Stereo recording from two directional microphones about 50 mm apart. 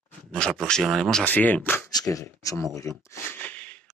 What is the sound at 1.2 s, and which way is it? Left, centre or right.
Speech, left.